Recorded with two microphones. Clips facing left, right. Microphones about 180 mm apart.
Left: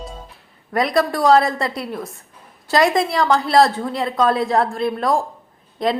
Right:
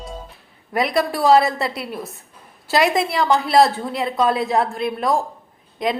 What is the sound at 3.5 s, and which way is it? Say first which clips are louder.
Speech: even; 20° right (ahead or behind).